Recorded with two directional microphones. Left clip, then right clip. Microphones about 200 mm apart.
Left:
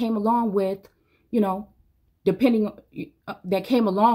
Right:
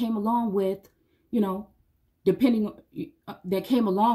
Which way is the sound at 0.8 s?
5° right (ahead or behind).